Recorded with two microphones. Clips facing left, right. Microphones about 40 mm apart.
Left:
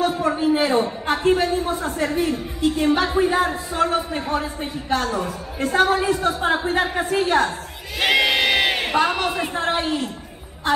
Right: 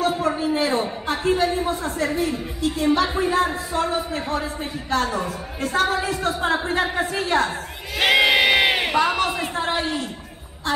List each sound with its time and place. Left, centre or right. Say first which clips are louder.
0.4 s speech: left 3 dB; centre
1.4 s a woman's voice: even; centre
1.8 s speech: left 1 dB; centre
5.0 s a woman's voice: left 1 dB; centre
5.6 s a woman's voice: left 3 dB; centre
8.0 s crowd: right 2 dB; centre
8.9 s speech: even; centre